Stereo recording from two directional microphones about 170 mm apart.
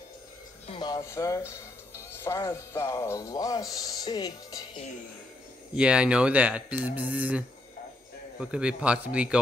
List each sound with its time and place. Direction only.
0.7 s speech: 25° left (ahead or behind)
5.8 s speech: 5° right (ahead or behind)